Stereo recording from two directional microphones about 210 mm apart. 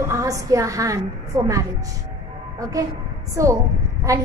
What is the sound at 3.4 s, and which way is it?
Speech, 15° right (ahead or behind).